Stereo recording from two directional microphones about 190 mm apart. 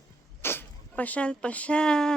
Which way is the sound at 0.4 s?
10° left (ahead or behind).